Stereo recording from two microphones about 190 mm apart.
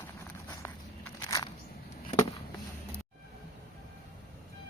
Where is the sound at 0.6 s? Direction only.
10° left (ahead or behind).